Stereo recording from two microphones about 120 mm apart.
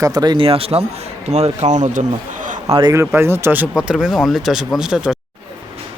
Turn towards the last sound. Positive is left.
turn(degrees=-5)  # may be behind; listen again after turning